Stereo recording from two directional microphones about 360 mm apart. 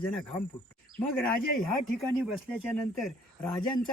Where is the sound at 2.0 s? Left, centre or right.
Centre.